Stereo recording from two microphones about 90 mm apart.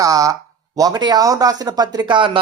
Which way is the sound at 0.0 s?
40° right (ahead or behind).